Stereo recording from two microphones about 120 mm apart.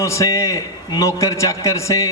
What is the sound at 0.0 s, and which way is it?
A man's voice, 25° left (ahead or behind).